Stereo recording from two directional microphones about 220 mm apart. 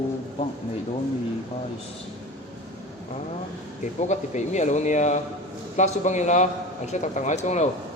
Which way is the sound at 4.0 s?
30° left (ahead or behind).